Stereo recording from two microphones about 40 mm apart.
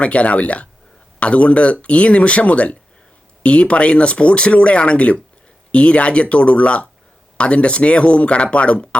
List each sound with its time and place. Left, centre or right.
0.0 s speech: left